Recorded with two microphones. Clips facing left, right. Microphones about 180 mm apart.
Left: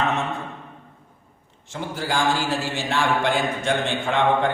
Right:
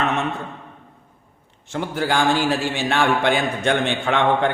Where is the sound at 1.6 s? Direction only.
65° right (ahead or behind).